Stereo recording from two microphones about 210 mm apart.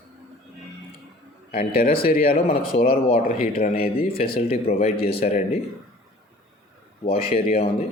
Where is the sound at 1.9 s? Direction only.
45° left (ahead or behind).